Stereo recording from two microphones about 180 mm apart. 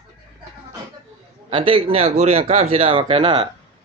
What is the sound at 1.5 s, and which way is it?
Speech, 30° right (ahead or behind).